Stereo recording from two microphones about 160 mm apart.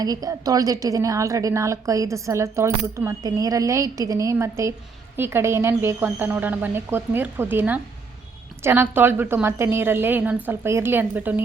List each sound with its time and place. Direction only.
0.0 s a woman's voice: 25° right (ahead or behind)